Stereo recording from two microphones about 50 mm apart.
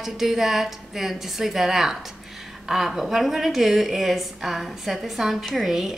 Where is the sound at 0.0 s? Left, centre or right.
Centre.